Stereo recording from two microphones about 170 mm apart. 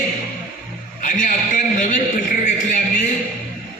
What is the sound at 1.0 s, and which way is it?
Speech, 50° left (ahead or behind).